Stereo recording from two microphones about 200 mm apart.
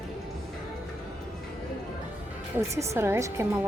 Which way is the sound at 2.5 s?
15° right (ahead or behind).